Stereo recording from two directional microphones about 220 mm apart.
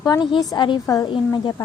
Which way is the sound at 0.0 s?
20° left (ahead or behind).